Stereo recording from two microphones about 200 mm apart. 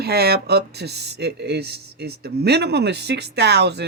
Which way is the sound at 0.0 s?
55° right (ahead or behind).